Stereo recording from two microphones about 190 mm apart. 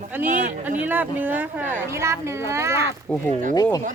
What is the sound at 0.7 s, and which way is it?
Speech, 10° right (ahead or behind).